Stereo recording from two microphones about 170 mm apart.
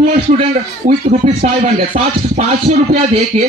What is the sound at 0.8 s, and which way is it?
Speech, 50° right (ahead or behind).